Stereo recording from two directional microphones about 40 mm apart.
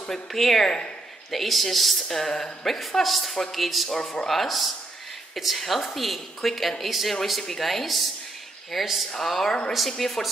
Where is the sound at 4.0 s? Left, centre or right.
Centre.